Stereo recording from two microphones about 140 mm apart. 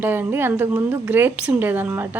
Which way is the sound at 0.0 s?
15° right (ahead or behind).